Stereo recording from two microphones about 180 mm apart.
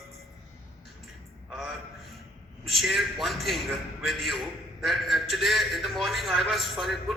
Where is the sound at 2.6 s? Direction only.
Centre (ahead or behind).